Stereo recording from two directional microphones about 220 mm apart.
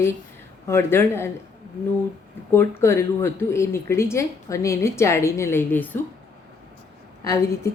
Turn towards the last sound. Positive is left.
turn(degrees=15)  # may be behind; listen again after turning